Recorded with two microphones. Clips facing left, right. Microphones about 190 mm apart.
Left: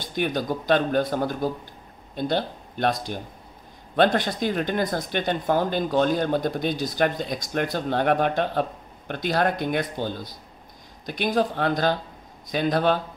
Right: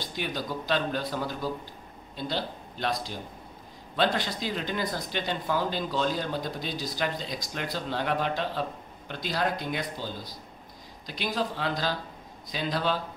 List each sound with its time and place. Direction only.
0.1 s a man's voice: 55° left (ahead or behind)